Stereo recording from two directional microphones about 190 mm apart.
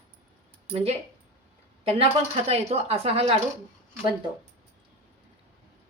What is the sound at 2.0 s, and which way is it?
Speech, 35° right (ahead or behind).